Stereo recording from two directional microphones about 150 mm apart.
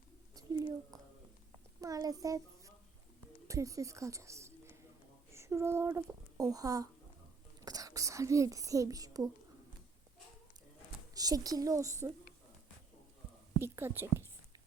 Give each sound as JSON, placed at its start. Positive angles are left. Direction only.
{"t": 0.3, "sound": "a sound", "side_deg": -25}
{"t": 1.8, "sound": "a child's voice", "side_deg": -25}
{"t": 5.3, "sound": "a sound", "side_deg": -15}
{"t": 6.3, "sound": "a woman's voice", "side_deg": -25}
{"t": 11.1, "sound": "a woman's voice", "side_deg": -25}
{"t": 13.6, "sound": "a woman's voice", "side_deg": -15}